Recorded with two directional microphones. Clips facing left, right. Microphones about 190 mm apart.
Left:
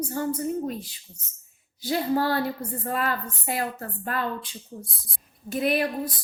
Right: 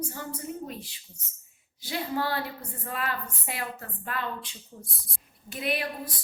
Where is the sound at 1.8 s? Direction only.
40° left (ahead or behind).